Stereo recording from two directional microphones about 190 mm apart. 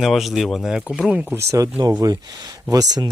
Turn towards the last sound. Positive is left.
turn(degrees=-20)  # may be behind; listen again after turning